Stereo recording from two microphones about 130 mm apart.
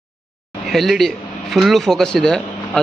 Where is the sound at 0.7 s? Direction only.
Centre (ahead or behind).